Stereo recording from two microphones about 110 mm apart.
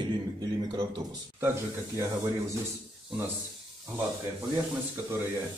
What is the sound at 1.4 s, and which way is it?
Speech, 25° right (ahead or behind).